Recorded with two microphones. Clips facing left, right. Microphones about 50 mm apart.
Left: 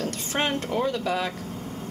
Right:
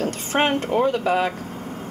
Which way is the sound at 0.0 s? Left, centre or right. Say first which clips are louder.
Right 6 dB; right.